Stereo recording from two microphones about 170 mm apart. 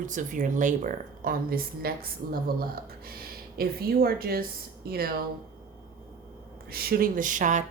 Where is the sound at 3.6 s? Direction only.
65° right (ahead or behind).